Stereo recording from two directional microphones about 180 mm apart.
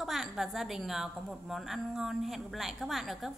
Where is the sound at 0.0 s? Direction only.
Centre (ahead or behind).